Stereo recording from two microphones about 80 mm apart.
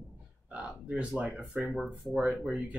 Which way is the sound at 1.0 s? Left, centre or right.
Centre.